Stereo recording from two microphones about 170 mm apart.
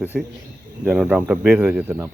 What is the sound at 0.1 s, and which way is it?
Speech, centre (ahead or behind).